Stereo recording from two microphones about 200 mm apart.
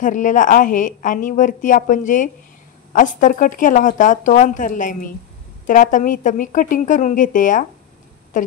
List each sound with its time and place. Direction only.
0.0 s a woman's voice: 40° left (ahead or behind)